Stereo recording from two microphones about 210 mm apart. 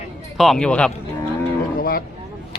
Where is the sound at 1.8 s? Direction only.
45° left (ahead or behind).